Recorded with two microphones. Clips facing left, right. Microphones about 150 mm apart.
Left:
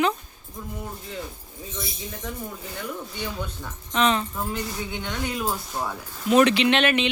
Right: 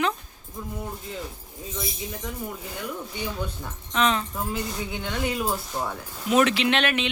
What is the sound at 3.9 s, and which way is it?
Speech, centre (ahead or behind).